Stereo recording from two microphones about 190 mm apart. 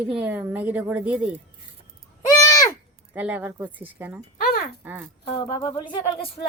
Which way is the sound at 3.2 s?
10° right (ahead or behind).